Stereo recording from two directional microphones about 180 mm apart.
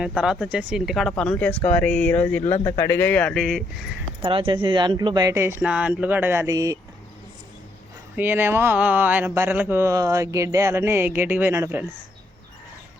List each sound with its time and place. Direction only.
0.2 s speech: 5° right (ahead or behind)
2.4 s speech: 40° left (ahead or behind)
2.7 s speech: 15° left (ahead or behind)
4.2 s speech: 30° right (ahead or behind)
8.1 s speech: 10° right (ahead or behind)